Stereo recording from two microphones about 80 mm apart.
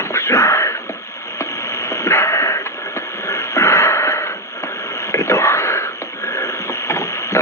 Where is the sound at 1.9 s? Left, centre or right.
Left.